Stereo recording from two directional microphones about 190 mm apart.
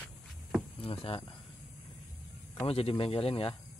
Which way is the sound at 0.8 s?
30° left (ahead or behind).